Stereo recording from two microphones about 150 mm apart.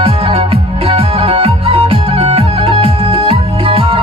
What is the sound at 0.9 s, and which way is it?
Music, 40° right (ahead or behind).